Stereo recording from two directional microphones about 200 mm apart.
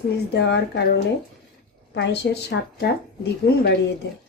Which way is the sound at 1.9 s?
60° left (ahead or behind).